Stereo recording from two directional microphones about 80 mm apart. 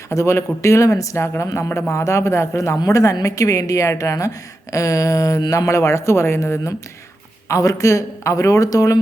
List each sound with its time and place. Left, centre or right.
0.1 s speech: left